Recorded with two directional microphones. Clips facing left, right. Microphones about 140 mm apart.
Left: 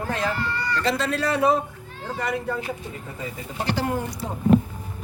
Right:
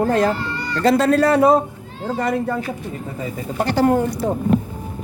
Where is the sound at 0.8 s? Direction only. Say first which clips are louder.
Right 11 dB; 45° right (ahead or behind).